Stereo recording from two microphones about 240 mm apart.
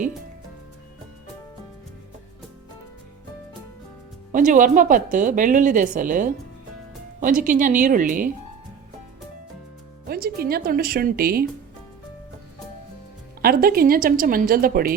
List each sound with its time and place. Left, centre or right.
4.3 s a woman's voice: right
10.1 s a woman's voice: right
13.4 s a woman's voice: right